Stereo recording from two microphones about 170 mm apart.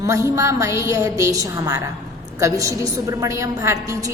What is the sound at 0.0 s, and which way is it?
A woman's voice, 20° right (ahead or behind).